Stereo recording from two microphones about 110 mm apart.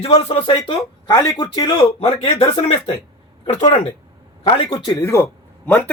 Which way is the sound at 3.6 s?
90° left.